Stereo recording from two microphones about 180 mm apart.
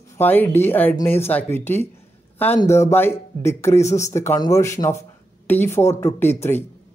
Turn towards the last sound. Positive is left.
turn(degrees=15)  # may be behind; listen again after turning